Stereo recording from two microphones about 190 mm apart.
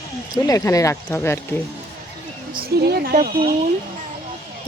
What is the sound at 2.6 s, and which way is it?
Speech, 55° right (ahead or behind).